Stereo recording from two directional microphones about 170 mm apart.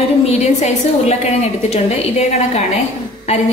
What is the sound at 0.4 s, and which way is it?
A woman's voice, 40° left (ahead or behind).